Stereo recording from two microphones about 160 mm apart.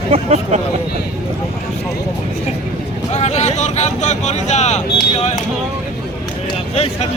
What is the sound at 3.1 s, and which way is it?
Vehicle, 45° left (ahead or behind).